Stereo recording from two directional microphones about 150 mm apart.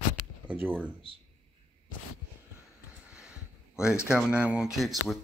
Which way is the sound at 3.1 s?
5° right (ahead or behind).